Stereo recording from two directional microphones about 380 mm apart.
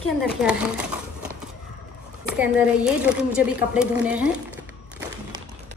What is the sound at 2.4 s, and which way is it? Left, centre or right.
A woman's voice, centre.